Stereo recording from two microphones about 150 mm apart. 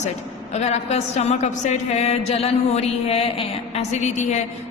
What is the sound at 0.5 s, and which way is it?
Music, 45° left (ahead or behind).